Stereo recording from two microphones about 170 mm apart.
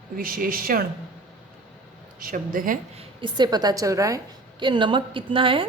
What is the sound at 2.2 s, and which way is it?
Speech, 55° right (ahead or behind).